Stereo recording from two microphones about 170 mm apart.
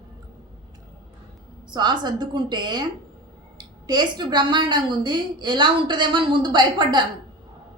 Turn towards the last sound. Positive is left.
turn(degrees=-25)  # may be behind; listen again after turning